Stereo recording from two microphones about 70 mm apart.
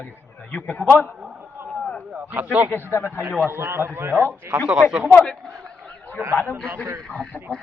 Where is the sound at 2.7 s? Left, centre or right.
Left.